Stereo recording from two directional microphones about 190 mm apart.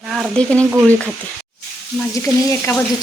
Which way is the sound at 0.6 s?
15° right (ahead or behind).